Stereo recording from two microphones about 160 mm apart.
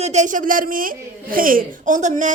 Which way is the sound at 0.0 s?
45° right (ahead or behind).